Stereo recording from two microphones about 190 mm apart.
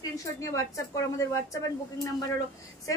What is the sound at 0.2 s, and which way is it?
A woman's voice, 15° left (ahead or behind).